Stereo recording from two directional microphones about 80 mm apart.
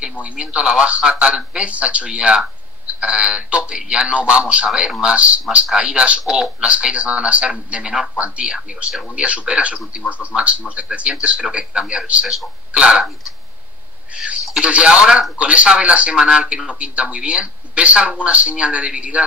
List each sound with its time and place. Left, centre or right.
0.2 s speech: centre
14.1 s speech: centre